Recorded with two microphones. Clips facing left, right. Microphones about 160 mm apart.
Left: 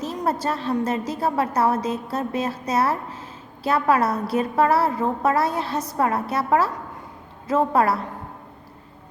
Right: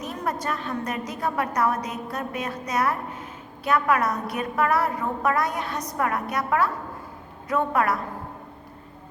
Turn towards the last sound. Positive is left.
turn(degrees=30)  # may be behind; listen again after turning